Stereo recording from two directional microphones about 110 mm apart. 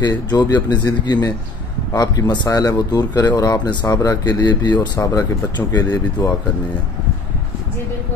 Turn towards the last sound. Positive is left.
turn(degrees=35)  # may be behind; listen again after turning